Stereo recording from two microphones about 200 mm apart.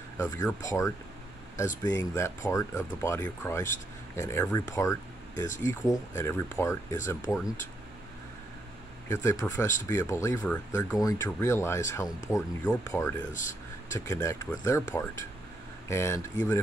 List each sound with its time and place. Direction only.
0.2 s speech: 15° left (ahead or behind)
9.1 s speech: 15° left (ahead or behind)
13.3 s speech: 40° left (ahead or behind)
13.8 s speech: 15° left (ahead or behind)